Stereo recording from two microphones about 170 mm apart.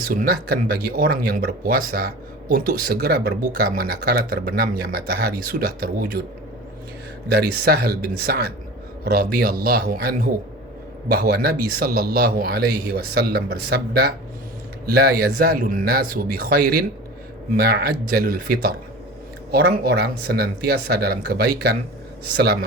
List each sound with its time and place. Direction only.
0.0 s speech: 60° right (ahead or behind)
7.3 s speech: 70° right (ahead or behind)